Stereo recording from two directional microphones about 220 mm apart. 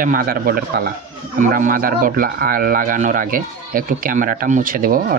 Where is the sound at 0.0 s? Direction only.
40° right (ahead or behind).